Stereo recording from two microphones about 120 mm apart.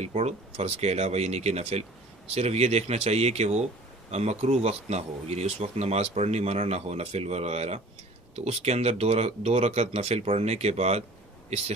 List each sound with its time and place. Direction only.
0.0 s speech: 65° right (ahead or behind)